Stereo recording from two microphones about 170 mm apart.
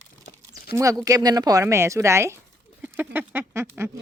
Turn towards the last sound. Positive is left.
turn(degrees=-15)  # may be behind; listen again after turning